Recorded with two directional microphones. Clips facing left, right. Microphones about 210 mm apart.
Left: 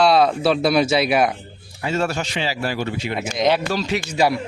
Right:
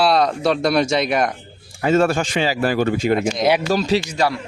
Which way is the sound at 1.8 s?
50° right (ahead or behind).